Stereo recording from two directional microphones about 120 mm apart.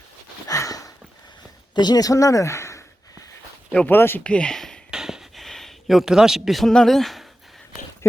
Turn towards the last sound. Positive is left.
turn(degrees=0)  # may be behind; listen again after turning